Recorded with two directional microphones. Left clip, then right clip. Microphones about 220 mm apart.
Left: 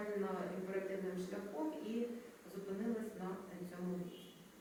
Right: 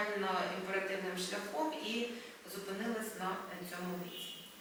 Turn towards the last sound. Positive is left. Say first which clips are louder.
# right 4 dB
turn(degrees=15)  # may be behind; listen again after turning